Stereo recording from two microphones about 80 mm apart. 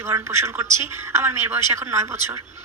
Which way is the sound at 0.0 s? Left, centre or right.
Right.